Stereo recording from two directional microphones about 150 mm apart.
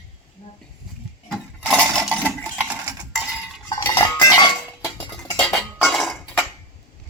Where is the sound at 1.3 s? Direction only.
5° left (ahead or behind).